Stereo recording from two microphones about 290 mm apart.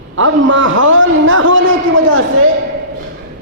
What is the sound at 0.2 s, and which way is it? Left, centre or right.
A man's voice, right.